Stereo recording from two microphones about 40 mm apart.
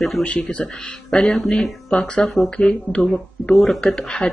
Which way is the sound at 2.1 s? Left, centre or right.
Left.